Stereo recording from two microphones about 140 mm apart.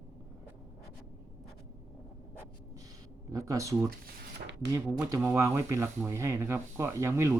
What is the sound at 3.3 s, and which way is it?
Speech, 25° right (ahead or behind).